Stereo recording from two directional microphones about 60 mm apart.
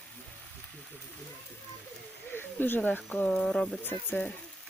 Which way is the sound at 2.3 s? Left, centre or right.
Left.